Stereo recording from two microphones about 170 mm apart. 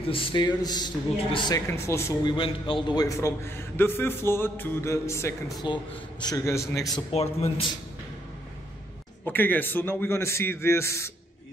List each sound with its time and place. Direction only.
0.0 s a man's voice: 30° left (ahead or behind)
1.7 s a man's voice: 15° left (ahead or behind)
2.3 s a man's voice: 30° left (ahead or behind)
7.1 s a man's voice: 35° left (ahead or behind)
9.2 s a man's voice: 10° left (ahead or behind)